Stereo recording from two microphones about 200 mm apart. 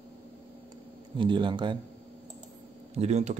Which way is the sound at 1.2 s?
25° right (ahead or behind).